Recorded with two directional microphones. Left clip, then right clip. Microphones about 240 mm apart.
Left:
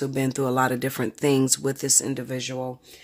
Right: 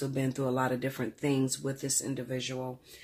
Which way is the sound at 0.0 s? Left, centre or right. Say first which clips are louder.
Left 7 dB; left.